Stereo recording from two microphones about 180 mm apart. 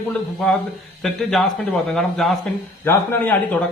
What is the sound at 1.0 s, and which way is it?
A man's voice, centre (ahead or behind).